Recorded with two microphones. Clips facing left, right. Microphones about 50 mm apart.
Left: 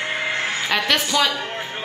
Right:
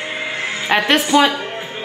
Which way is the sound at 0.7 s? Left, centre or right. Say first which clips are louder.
Right 7 dB; right.